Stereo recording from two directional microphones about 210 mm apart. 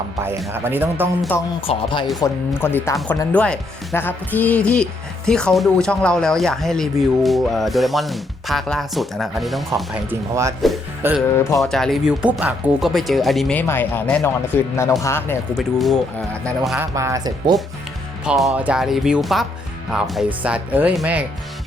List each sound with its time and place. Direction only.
0.5 s speech: 10° right (ahead or behind)
1.6 s speech: 25° left (ahead or behind)
2.1 s speech: 15° left (ahead or behind); by 11.2 s 10° right (ahead or behind)
11.6 s speech: centre (ahead or behind)
15.5 s speech: centre (ahead or behind)
16.7 s speech: 15° right (ahead or behind)
18.3 s speech: 5° right (ahead or behind)